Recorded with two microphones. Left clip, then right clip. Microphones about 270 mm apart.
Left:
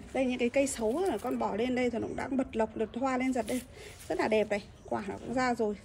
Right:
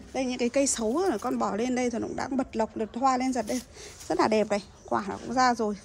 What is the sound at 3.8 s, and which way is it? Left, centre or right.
Speech, right.